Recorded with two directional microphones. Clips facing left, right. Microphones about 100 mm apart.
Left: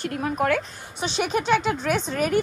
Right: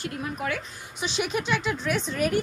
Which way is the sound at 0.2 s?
55° left (ahead or behind).